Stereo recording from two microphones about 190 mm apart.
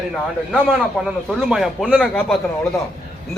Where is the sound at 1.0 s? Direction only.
Centre (ahead or behind).